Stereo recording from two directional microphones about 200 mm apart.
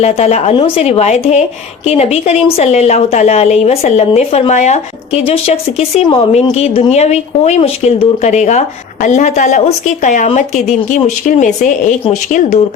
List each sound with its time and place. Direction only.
0.0 s a woman's voice: 30° left (ahead or behind)